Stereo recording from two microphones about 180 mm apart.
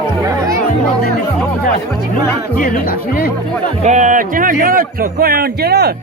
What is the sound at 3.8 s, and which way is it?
Speech, 45° right (ahead or behind).